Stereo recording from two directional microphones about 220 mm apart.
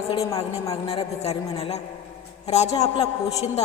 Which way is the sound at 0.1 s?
15° left (ahead or behind).